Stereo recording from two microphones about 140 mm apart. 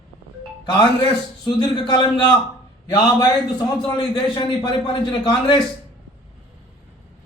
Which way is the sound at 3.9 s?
35° left (ahead or behind).